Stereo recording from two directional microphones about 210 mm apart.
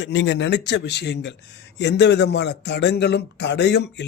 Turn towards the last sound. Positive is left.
turn(degrees=55)  # may be behind; listen again after turning